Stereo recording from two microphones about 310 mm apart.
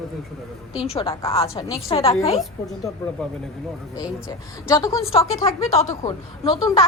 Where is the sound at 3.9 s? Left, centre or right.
Centre.